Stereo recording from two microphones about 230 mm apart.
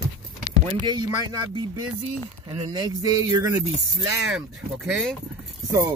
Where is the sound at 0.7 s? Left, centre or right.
Centre.